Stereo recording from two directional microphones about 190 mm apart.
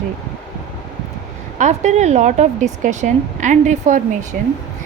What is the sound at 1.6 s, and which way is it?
A woman's voice, 35° right (ahead or behind).